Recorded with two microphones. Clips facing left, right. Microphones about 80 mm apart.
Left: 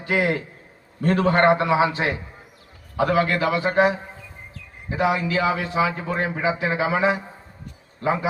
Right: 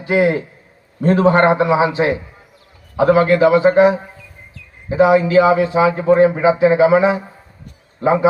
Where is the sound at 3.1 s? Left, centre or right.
Right.